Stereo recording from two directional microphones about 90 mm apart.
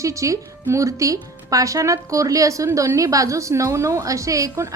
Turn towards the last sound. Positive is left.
turn(degrees=-35)  # may be behind; listen again after turning